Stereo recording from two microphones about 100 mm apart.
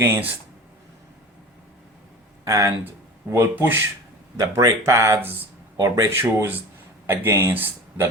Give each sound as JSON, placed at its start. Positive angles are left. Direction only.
{"t": 2.5, "sound": "speech", "side_deg": -35}
{"t": 4.4, "sound": "speech", "side_deg": -30}
{"t": 6.1, "sound": "speech", "side_deg": -25}